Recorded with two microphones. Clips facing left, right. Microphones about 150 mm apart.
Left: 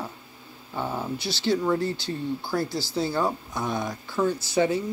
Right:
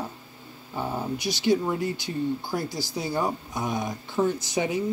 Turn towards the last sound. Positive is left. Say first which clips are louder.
# left 3 dB
turn(degrees=-15)  # may be behind; listen again after turning